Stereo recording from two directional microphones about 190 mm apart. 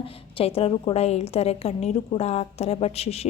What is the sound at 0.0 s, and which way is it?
A woman's voice, 30° left (ahead or behind).